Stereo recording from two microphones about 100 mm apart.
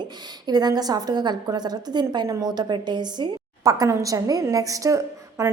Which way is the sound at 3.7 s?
35° right (ahead or behind).